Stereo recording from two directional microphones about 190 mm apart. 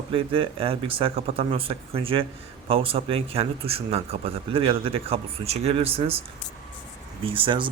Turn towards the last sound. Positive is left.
turn(degrees=-25)  # may be behind; listen again after turning